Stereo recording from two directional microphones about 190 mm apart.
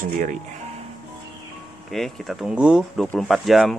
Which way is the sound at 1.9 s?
Centre (ahead or behind).